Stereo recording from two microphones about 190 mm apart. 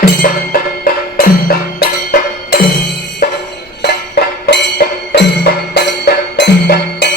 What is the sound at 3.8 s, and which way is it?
Music, 60° left (ahead or behind).